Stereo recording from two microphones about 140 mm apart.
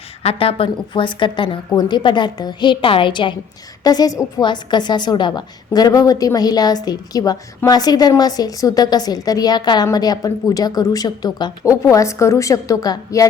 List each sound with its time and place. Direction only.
0.2 s a woman's voice: 45° left (ahead or behind); by 13.2 s 25° left (ahead or behind)